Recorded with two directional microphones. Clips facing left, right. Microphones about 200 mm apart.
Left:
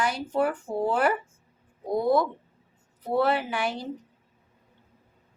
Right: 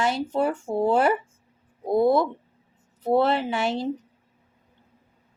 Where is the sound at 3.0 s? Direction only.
25° right (ahead or behind).